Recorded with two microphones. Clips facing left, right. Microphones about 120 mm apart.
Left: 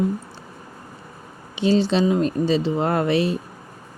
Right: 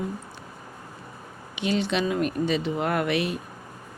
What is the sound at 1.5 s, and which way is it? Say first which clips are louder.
Speech: left 7 dB; 30° left (ahead or behind).